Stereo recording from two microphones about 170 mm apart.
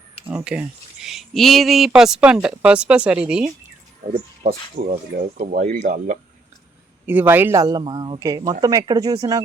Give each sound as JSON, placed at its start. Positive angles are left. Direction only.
{"t": 0.3, "sound": "speech", "side_deg": -5}
{"t": 4.4, "sound": "speech", "side_deg": -50}
{"t": 7.0, "sound": "a man's voice", "side_deg": -10}